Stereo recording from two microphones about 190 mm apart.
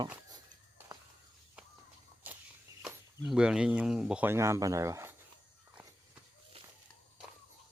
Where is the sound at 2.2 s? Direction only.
10° right (ahead or behind).